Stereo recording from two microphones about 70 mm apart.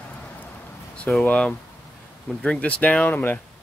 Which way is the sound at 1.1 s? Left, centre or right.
Centre.